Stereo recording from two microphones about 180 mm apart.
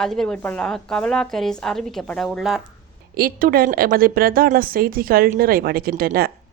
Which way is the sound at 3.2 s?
55° right (ahead or behind).